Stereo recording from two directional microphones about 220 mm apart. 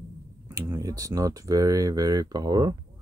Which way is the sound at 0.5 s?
15° right (ahead or behind).